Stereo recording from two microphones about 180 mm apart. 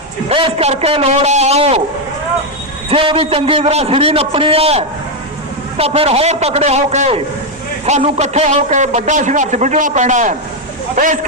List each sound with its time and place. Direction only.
0.3 s a man's voice: 30° right (ahead or behind)
2.9 s a man's voice: 30° right (ahead or behind); by 11.3 s 45° right (ahead or behind)